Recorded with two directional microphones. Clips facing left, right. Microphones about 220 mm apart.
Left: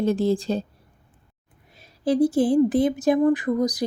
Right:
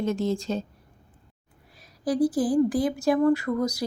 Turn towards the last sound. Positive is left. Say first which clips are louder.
# left 2 dB
turn(degrees=15)  # may be behind; listen again after turning